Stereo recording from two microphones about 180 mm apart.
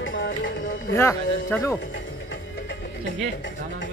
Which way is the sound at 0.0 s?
90° left.